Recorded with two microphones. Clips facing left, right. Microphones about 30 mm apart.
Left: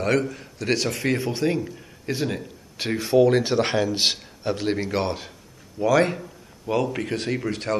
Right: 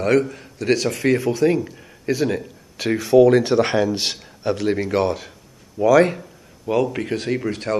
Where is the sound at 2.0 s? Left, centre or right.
Right.